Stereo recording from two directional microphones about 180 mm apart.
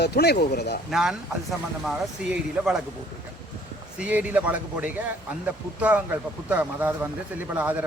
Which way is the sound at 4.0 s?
10° right (ahead or behind).